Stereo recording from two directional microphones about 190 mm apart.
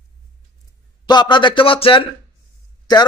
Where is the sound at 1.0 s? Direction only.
20° left (ahead or behind).